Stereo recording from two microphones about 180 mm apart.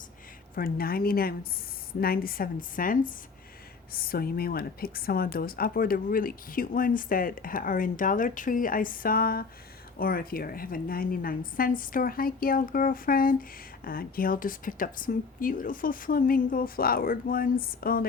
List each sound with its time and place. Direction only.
0.5 s a woman's voice: 55° left (ahead or behind)